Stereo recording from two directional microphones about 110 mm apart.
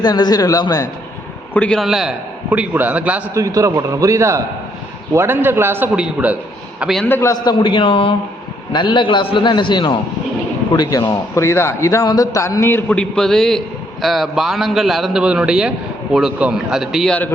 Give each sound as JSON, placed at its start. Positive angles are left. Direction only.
{"t": 0.0, "sound": "a man's voice", "side_deg": 40}
{"t": 1.5, "sound": "a man's voice", "side_deg": 10}
{"t": 1.8, "sound": "a man's voice", "side_deg": 0}
{"t": 2.5, "sound": "a man's voice", "side_deg": -15}
{"t": 3.3, "sound": "a man's voice", "side_deg": -30}
{"t": 7.0, "sound": "a man's voice", "side_deg": 20}
{"t": 7.4, "sound": "a man's voice", "side_deg": 50}